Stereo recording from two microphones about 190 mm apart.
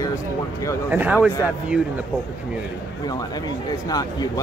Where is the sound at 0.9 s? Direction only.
10° right (ahead or behind).